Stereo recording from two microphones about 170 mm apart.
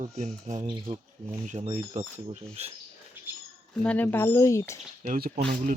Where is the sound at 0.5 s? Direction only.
25° right (ahead or behind).